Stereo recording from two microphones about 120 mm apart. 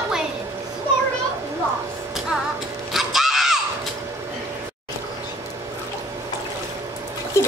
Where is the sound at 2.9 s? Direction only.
5° right (ahead or behind).